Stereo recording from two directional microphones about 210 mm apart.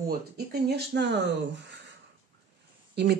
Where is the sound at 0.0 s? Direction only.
50° right (ahead or behind).